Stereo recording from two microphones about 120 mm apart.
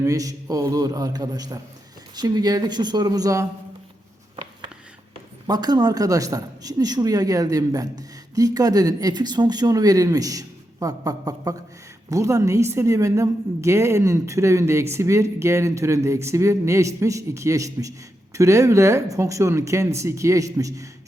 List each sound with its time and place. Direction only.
0.0 s a man's voice: 30° right (ahead or behind)
5.5 s a man's voice: 35° right (ahead or behind)